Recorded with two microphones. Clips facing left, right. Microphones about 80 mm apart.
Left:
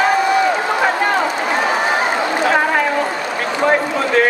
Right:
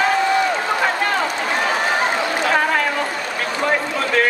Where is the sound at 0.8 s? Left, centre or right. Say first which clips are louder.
Left 3 dB; centre.